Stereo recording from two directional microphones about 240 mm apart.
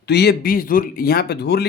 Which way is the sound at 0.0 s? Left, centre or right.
Left.